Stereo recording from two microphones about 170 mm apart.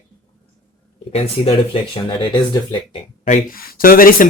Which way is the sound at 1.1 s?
35° left (ahead or behind).